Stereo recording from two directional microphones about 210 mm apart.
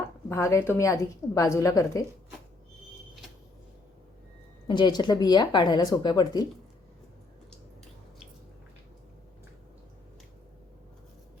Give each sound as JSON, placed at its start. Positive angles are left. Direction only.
{"t": 0.3, "sound": "a woman's voice", "side_deg": 15}
{"t": 4.7, "sound": "speech", "side_deg": 20}